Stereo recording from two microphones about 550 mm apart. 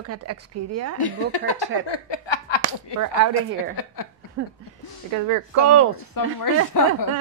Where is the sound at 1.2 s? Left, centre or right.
Left.